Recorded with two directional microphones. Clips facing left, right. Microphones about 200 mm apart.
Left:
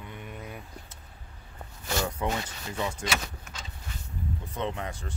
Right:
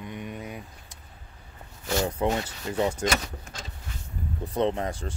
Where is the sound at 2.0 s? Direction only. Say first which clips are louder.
Right 6 dB; 25° right (ahead or behind).